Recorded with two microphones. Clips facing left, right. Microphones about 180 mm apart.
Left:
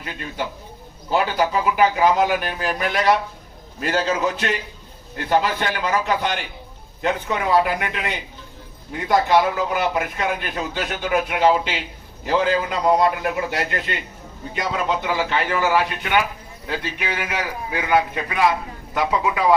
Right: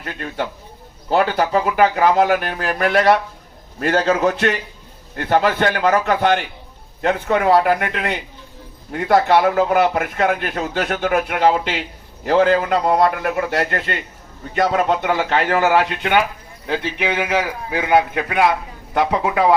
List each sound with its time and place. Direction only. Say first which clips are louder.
0.0 s a man's voice: right 3 dB; 55° right (ahead or behind)
17.2 s a man's voice: right 6 dB; 25° right (ahead or behind)
17.8 s speech: right 4 dB; 65° right (ahead or behind)